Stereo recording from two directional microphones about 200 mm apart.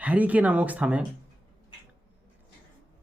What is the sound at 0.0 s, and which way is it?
Speech, 5° right (ahead or behind).